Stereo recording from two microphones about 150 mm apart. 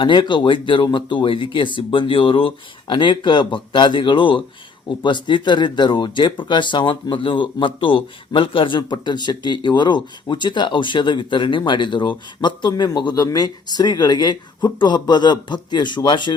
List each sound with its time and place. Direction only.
0.0 s speech: 30° left (ahead or behind)